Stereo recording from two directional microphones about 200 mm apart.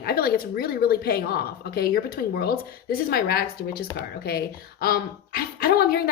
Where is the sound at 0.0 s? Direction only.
50° left (ahead or behind).